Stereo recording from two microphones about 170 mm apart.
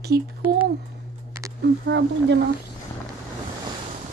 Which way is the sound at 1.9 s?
90° right.